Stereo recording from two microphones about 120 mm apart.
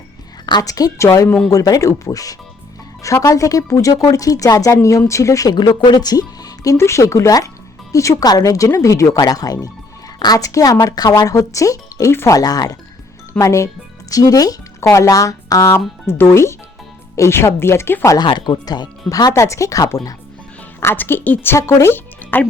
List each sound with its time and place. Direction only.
0.4 s speech: 35° left (ahead or behind)
18.3 s speech: 40° left (ahead or behind)
20.8 s speech: 15° left (ahead or behind)